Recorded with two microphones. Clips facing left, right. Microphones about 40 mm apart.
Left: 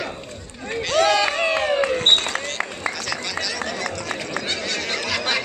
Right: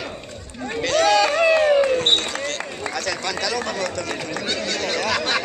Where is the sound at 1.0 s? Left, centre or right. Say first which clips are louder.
Right 4 dB; left.